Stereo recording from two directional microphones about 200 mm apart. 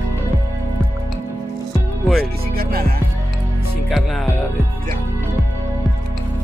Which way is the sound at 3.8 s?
Centre (ahead or behind).